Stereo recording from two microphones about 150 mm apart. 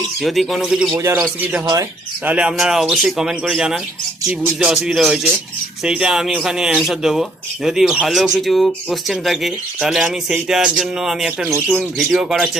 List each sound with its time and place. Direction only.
0.2 s speech: centre (ahead or behind)
0.9 s speech: 20° right (ahead or behind)
2.2 s speech: 5° right (ahead or behind)